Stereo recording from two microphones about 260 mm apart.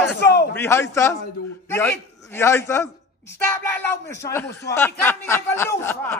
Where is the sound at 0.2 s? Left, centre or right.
Left.